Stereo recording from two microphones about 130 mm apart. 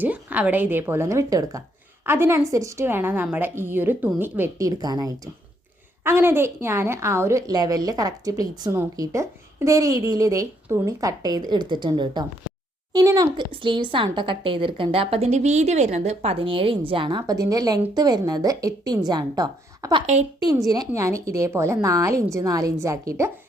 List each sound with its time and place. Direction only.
0.0 s a woman's voice: 15° right (ahead or behind); by 13.4 s 30° right (ahead or behind)
13.5 s a woman's voice: 40° right (ahead or behind); by 23.3 s 25° right (ahead or behind)